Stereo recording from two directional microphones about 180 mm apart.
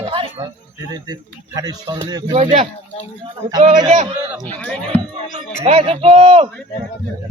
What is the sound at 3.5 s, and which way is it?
Speech, 25° right (ahead or behind).